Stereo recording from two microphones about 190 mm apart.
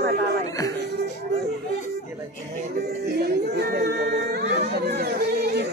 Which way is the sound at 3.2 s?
55° right (ahead or behind).